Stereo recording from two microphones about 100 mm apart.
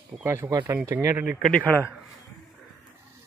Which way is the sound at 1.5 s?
15° left (ahead or behind).